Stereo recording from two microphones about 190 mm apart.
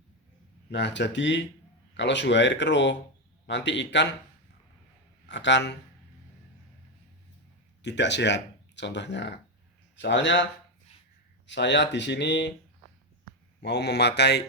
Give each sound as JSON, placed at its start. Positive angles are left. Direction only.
{"t": 0.7, "sound": "speech", "side_deg": 65}
{"t": 5.2, "sound": "a man's voice", "side_deg": 65}
{"t": 7.8, "sound": "speech", "side_deg": 65}
{"t": 13.6, "sound": "a man's voice", "side_deg": 65}